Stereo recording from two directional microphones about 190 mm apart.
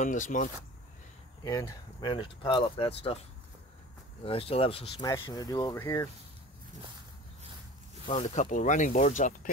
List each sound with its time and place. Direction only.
0.0 s speech: 40° left (ahead or behind)
1.4 s speech: 20° left (ahead or behind)
4.2 s speech: 30° left (ahead or behind)
5.0 s speech: 20° left (ahead or behind)
8.1 s speech: 35° left (ahead or behind)